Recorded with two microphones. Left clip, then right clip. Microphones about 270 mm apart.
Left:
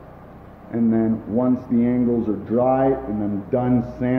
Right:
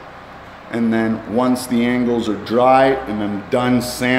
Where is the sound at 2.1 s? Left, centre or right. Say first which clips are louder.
Right 3 dB; right.